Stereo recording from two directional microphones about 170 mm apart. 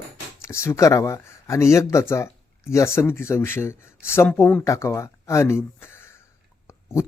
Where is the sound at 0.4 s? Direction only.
15° left (ahead or behind).